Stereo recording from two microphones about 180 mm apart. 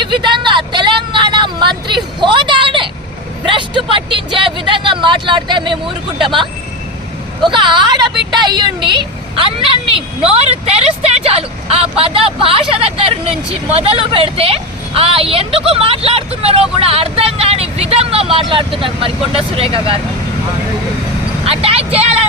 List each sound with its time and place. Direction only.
0.0 s vehicle: 25° right (ahead or behind)
6.2 s a woman's voice: 25° right (ahead or behind)
21.4 s speech: 30° right (ahead or behind)